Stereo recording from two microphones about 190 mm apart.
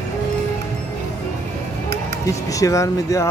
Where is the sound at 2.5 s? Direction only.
15° left (ahead or behind).